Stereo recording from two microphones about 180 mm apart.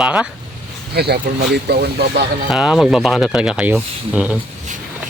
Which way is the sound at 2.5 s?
Centre (ahead or behind).